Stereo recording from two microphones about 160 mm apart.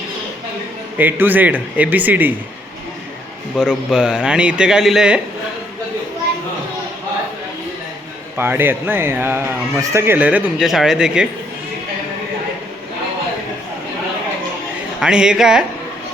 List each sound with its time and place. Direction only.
0.9 s speech: 10° right (ahead or behind)
3.6 s a man's voice: 5° right (ahead or behind)
8.4 s speech: 15° right (ahead or behind)
15.0 s a man's voice: 5° right (ahead or behind)